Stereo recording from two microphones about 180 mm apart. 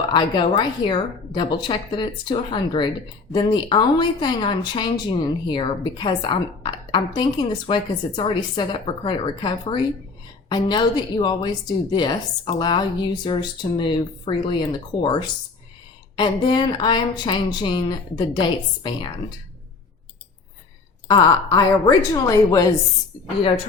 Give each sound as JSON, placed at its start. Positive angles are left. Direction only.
{"t": 0.1, "sound": "speech", "side_deg": 25}
{"t": 21.1, "sound": "speech", "side_deg": 20}